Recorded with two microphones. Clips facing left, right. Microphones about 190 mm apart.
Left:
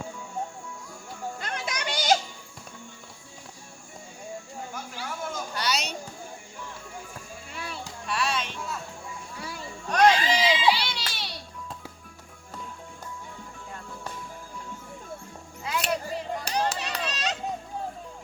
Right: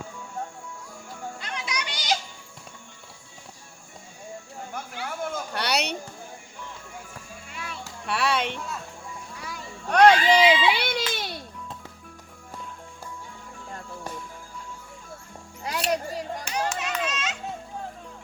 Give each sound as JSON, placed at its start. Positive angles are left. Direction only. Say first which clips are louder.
{"t": 1.4, "sound": "a sound", "louder": "right 1 dB", "side_deg": 50}
{"t": 4.7, "sound": "a sound", "louder": "right 4 dB", "side_deg": -55}
{"t": 7.5, "sound": "music", "louder": "left 1 dB", "side_deg": 35}
{"t": 8.0, "sound": "music", "louder": "right 4 dB", "side_deg": -65}
{"t": 9.9, "sound": "baby cry", "louder": "right 4 dB", "side_deg": -60}
{"t": 15.6, "sound": "music", "louder": "right 2 dB", "side_deg": -40}
{"t": 16.4, "sound": "children playing", "louder": "left 1 dB", "side_deg": 35}